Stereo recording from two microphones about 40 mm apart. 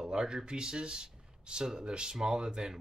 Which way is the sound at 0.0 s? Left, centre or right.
Centre.